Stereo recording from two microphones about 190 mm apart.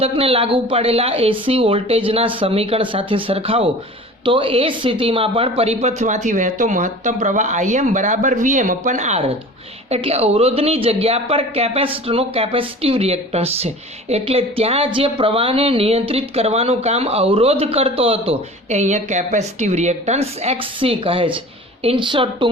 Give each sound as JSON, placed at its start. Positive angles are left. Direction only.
{"t": 0.0, "sound": "a woman's voice", "side_deg": -30}